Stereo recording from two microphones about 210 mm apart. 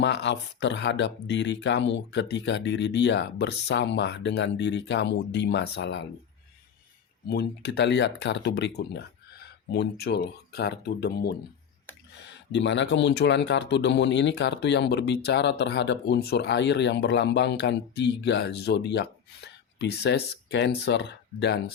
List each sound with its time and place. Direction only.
0.0 s speech: 55° left (ahead or behind)
7.3 s speech: 55° left (ahead or behind)
12.5 s speech: 60° left (ahead or behind)